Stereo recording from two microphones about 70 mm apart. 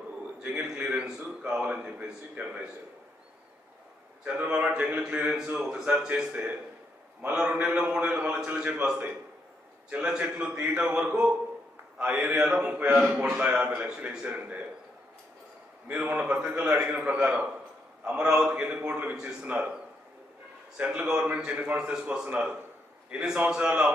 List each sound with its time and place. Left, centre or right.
0.4 s a man's voice: centre
4.2 s a man's voice: centre
12.0 s a man's voice: right
15.9 s a man's voice: centre
20.7 s a man's voice: centre
22.6 s a sound: right
23.3 s a man's voice: centre